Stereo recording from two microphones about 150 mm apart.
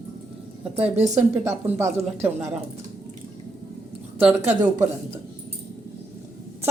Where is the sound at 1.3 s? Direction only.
15° right (ahead or behind).